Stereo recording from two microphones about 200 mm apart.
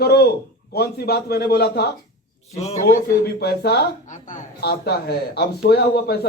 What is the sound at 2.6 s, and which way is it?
Speech, 35° left (ahead or behind).